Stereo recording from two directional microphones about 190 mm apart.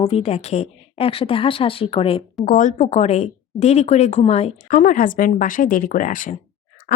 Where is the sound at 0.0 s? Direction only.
30° left (ahead or behind).